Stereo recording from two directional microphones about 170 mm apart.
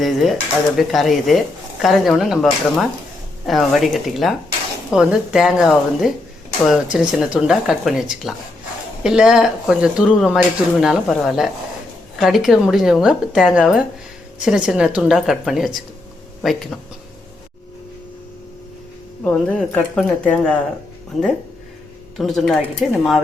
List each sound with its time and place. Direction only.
0.0 s speech: centre (ahead or behind)
19.2 s speech: 5° left (ahead or behind)
22.2 s speech: centre (ahead or behind)